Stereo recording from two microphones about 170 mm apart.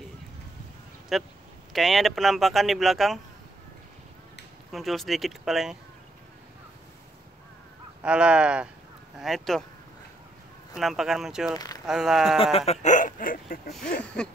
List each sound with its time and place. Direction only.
1.1 s speech: centre (ahead or behind)
4.7 s speech: centre (ahead or behind)
8.0 s speech: 5° right (ahead or behind)
10.8 s speech: centre (ahead or behind)
11.5 s speech: 20° left (ahead or behind)
11.8 s speech: centre (ahead or behind)
12.5 s speech: 40° left (ahead or behind); by 13.9 s 60° left (ahead or behind)
13.9 s a sound: 5° left (ahead or behind)